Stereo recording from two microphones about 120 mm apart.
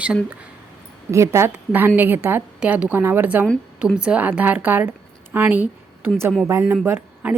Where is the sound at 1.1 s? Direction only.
25° right (ahead or behind).